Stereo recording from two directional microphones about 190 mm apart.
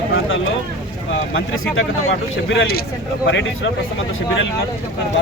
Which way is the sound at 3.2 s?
70° left (ahead or behind).